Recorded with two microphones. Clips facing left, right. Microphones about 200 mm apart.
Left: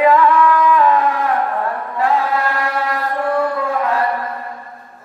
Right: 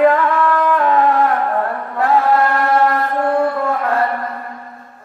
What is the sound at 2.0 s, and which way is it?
Mantra, 55° right (ahead or behind).